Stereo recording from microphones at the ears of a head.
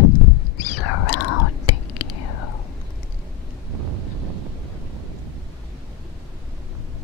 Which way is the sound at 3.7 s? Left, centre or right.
Right.